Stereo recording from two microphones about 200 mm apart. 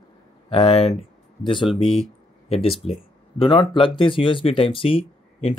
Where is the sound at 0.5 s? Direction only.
30° left (ahead or behind).